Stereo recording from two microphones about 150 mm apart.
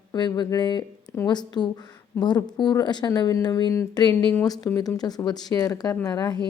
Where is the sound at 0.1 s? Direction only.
30° left (ahead or behind).